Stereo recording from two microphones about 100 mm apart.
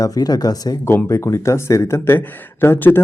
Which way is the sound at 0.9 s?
30° left (ahead or behind).